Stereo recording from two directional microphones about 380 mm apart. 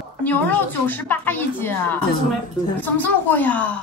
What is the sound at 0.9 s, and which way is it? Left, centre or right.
A woman's voice, centre.